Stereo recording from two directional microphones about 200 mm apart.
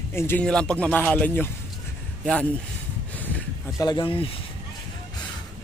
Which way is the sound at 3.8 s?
20° left (ahead or behind).